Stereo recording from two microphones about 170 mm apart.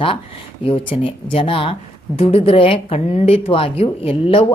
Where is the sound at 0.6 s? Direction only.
30° left (ahead or behind).